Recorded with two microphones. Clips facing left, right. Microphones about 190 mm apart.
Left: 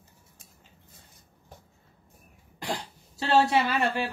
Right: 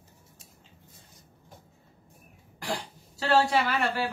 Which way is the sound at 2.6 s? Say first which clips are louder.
Even; 20° left (ahead or behind).